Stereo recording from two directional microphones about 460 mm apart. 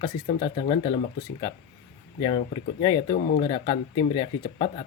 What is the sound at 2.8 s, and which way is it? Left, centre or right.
Speech, centre.